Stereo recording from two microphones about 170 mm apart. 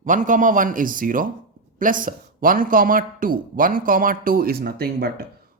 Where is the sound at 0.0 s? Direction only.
50° right (ahead or behind).